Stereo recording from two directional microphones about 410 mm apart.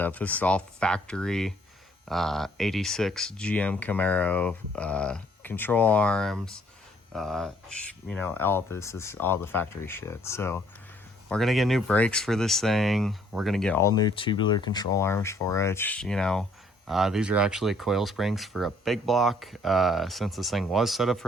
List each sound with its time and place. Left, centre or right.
0.0 s speech: centre